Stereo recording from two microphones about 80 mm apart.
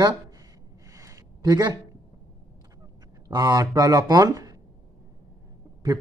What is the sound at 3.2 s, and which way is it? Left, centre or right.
Speech, right.